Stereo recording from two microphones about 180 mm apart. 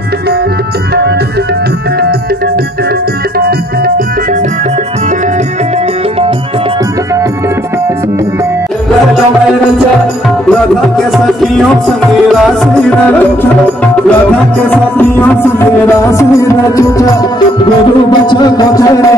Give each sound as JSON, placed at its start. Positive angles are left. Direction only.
{"t": 3.3, "sound": "music", "side_deg": -60}
{"t": 12.3, "sound": "music", "side_deg": 0}
{"t": 14.7, "sound": "music", "side_deg": 10}
{"t": 18.2, "sound": "music", "side_deg": 25}